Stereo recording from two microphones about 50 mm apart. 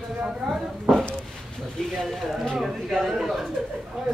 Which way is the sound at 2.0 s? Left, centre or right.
Centre.